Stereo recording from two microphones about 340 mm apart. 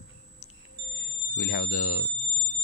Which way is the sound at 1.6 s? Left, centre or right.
Left.